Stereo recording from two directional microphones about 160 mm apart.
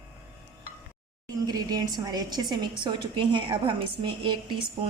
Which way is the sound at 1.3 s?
25° right (ahead or behind).